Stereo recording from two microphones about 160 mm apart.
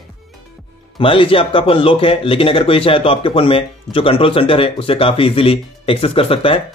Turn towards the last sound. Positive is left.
turn(degrees=35)  # may be behind; listen again after turning